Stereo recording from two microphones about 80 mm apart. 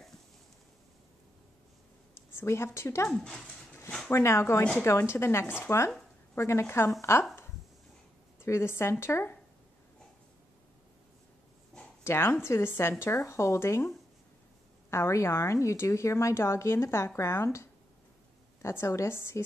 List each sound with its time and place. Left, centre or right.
2.3 s speech: left
3.2 s speech: centre
4.1 s speech: left
8.4 s a woman's voice: left
12.0 s speech: left
13.1 s speech: left